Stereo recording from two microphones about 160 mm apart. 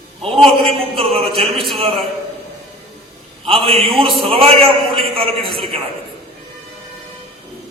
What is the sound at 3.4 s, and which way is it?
A man's voice, 35° right (ahead or behind).